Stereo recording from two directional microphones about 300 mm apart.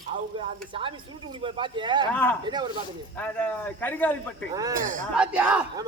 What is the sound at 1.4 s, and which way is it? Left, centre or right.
Speech, centre.